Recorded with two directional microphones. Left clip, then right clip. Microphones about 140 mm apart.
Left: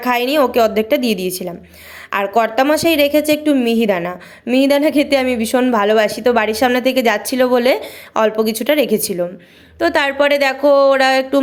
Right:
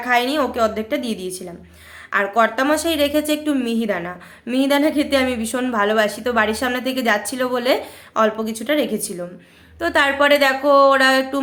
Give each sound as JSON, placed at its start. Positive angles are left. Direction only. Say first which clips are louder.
{"t": 0.0, "sound": "a woman's voice", "louder": "left 4 dB", "side_deg": 45}